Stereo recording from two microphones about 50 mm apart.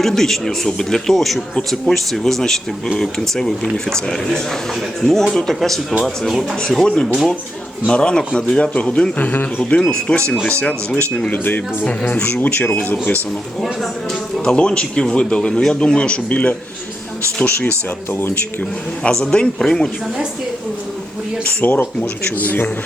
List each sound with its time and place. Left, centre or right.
0.0 s speech: centre
6.6 s speech: centre
9.1 s speech: left
11.3 s speech: left
13.6 s speech: centre
14.4 s speech: centre; by 18.3 s left
18.6 s speech: centre
21.4 s speech: left